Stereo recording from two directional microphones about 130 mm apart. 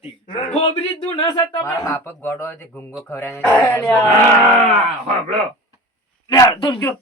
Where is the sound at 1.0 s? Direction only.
35° left (ahead or behind); by 3.9 s 15° left (ahead or behind).